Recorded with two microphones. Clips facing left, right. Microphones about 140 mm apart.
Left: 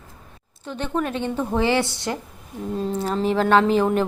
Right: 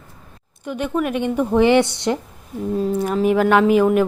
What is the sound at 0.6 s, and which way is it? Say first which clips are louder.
A woman's voice: right 4 dB; 10° right (ahead or behind).